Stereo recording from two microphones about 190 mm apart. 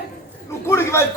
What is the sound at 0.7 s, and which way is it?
Speech, 15° left (ahead or behind).